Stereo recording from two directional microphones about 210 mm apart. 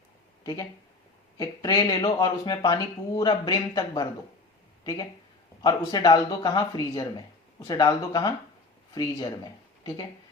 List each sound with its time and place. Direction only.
0.4 s speech: 15° left (ahead or behind)